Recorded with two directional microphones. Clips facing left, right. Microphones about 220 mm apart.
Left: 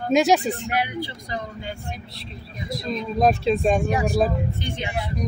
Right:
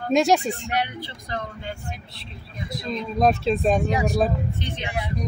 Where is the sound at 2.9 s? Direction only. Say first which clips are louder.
Left 1 dB; centre (ahead or behind).